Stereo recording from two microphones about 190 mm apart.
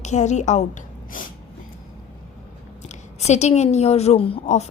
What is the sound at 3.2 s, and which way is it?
A woman's voice, 35° left (ahead or behind).